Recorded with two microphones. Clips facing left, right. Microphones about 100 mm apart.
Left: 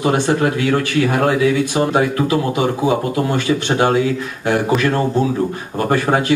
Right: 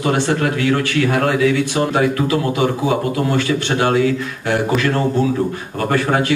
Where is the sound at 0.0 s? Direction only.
20° left (ahead or behind).